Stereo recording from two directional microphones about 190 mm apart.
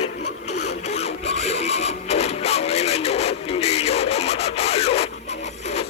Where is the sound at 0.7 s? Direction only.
35° left (ahead or behind).